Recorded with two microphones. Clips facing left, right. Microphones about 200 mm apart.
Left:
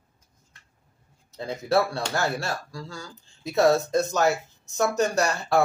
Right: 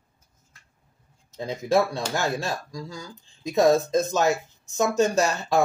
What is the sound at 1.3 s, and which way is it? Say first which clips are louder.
Speech: right 1 dB; 15° right (ahead or behind).